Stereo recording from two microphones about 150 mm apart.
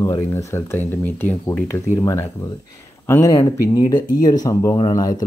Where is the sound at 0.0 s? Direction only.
20° left (ahead or behind).